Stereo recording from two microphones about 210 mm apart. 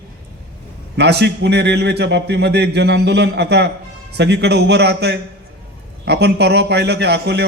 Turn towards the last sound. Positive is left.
turn(degrees=-50)  # may be behind; listen again after turning